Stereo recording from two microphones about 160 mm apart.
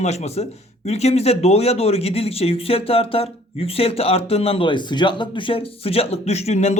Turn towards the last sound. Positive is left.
turn(degrees=45)  # may be behind; listen again after turning